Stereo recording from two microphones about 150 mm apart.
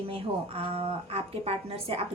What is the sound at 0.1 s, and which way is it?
Speech, 40° right (ahead or behind).